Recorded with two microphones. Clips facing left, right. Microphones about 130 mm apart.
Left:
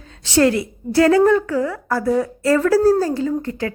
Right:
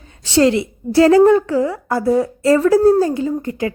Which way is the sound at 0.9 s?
25° right (ahead or behind).